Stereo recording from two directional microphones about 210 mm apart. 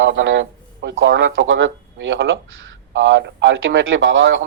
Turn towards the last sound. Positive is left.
turn(degrees=-65)  # may be behind; listen again after turning